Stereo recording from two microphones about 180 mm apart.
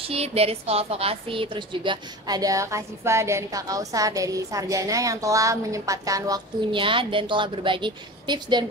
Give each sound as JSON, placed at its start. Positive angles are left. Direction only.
{"t": 0.0, "sound": "a woman's voice", "side_deg": -35}